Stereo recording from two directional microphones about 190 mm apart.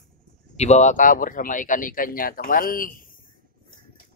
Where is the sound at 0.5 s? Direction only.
35° left (ahead or behind).